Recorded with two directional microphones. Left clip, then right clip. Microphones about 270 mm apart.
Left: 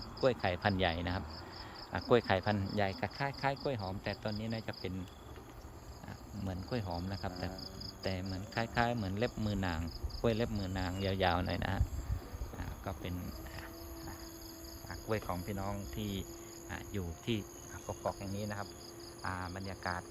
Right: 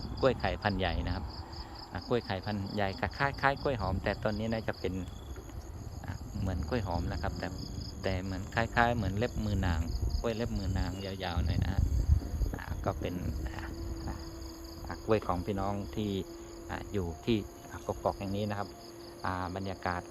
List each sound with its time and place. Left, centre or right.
0.2 s speech: centre
6.4 s speech: centre
12.8 s speech: centre
15.0 s insect: right
17.8 s speech: right
19.2 s insect: right